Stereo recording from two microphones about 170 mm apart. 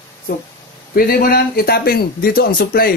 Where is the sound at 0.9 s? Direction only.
60° left (ahead or behind).